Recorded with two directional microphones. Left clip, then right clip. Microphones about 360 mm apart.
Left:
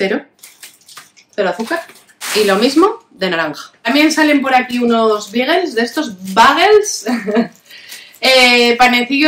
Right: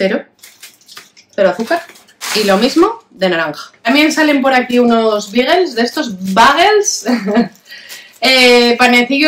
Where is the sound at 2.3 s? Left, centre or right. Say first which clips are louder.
Even; centre.